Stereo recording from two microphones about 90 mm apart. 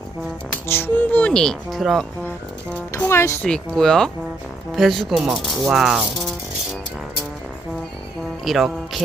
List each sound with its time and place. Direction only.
0.7 s speech: 25° left (ahead or behind)
1.3 s speech: 5° left (ahead or behind)
3.1 s speech: 30° left (ahead or behind)
3.4 s speech: 10° left (ahead or behind)
8.4 s speech: centre (ahead or behind)